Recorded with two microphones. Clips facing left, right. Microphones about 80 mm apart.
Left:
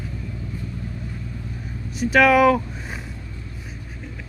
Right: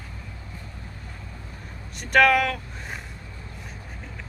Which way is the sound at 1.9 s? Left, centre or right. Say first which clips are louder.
Left 3 dB; centre.